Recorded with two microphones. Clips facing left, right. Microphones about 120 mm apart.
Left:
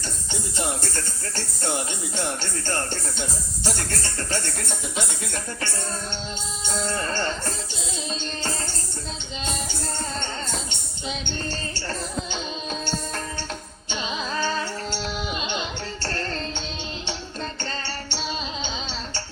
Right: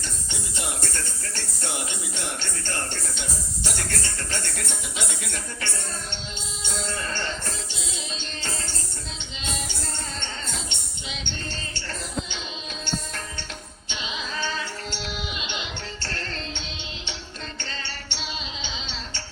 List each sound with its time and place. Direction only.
0.3 s speech: 35° left (ahead or behind)
8.2 s music: 40° left (ahead or behind)
10.2 s music: 40° left (ahead or behind)
13.8 s carnatic music: 40° left (ahead or behind)
17.6 s music: 40° left (ahead or behind)